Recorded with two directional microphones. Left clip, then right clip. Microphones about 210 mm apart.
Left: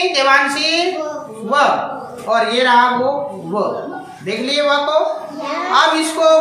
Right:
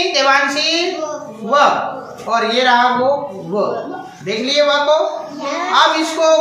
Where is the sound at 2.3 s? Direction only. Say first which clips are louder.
Even; 10° left (ahead or behind).